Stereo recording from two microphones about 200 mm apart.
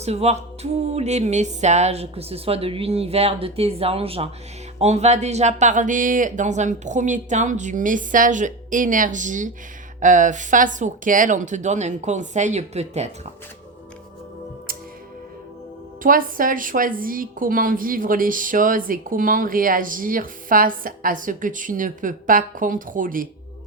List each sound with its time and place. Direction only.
0.0 s speech: 30° right (ahead or behind)
16.0 s a woman's voice: 45° right (ahead or behind)